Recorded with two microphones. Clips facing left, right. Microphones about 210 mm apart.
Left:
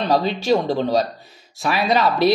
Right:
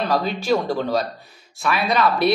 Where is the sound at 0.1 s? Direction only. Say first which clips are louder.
Left 4 dB; 25° left (ahead or behind).